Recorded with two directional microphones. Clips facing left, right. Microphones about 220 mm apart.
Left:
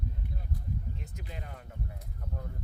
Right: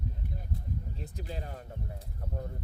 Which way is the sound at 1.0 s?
35° right (ahead or behind).